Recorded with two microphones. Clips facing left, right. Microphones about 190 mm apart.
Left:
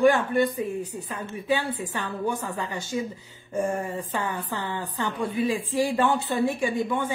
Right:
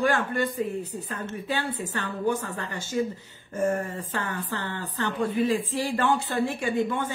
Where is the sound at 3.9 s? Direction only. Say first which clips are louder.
Left 2 dB; 15° left (ahead or behind).